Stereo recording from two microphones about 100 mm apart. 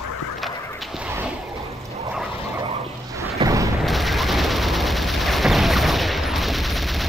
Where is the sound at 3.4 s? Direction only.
35° right (ahead or behind).